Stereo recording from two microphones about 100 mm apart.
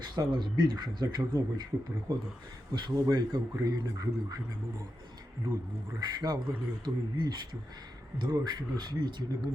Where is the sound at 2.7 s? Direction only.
45° right (ahead or behind).